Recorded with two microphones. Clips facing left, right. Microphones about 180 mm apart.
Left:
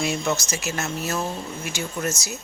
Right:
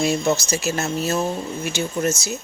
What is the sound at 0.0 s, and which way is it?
Speech, 30° right (ahead or behind).